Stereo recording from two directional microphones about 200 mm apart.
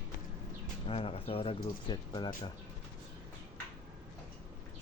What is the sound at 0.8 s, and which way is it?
Speech, 30° left (ahead or behind).